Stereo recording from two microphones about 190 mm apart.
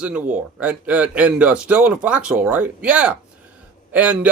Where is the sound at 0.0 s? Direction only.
5° right (ahead or behind).